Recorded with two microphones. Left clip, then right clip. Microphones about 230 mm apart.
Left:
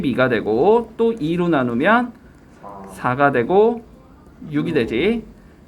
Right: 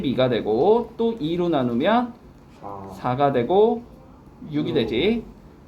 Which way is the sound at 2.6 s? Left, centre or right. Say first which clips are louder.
Right 1 dB; right.